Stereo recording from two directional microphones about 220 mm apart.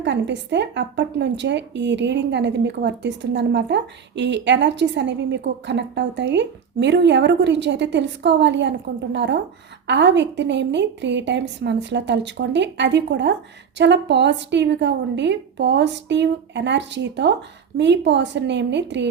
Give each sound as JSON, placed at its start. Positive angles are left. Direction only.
{"t": 0.0, "sound": "speech", "side_deg": -55}